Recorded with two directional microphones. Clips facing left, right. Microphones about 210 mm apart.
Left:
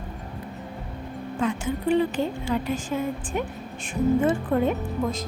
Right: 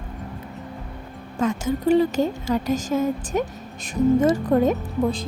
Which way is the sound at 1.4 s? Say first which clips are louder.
Right 4 dB; 40° right (ahead or behind).